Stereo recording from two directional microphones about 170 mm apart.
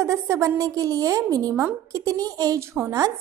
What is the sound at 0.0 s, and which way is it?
A woman's voice, 20° right (ahead or behind).